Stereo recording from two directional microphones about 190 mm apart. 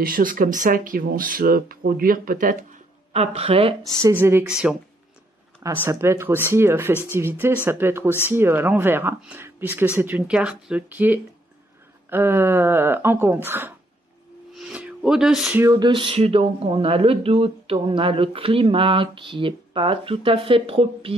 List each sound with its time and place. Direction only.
0.0 s speech: 50° right (ahead or behind)
3.1 s speech: 35° right (ahead or behind)
4.0 s speech: 10° right (ahead or behind)
14.6 s a sound: 5° right (ahead or behind)
15.6 s speech: 20° right (ahead or behind)